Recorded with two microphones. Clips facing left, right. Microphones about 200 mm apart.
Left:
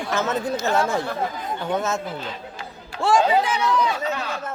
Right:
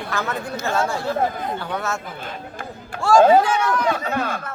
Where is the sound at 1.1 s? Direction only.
55° right (ahead or behind).